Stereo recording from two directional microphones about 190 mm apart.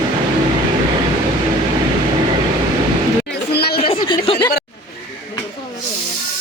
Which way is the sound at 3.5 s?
55° left (ahead or behind).